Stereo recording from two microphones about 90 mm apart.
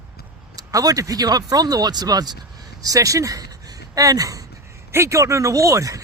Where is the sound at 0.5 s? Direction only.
40° right (ahead or behind).